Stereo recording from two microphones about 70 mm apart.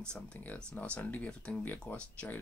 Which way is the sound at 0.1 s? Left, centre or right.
Left.